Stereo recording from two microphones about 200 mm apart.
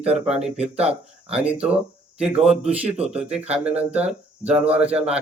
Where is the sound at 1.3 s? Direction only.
5° right (ahead or behind).